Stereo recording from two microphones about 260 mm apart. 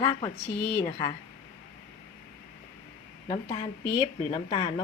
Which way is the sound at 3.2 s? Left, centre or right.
Centre.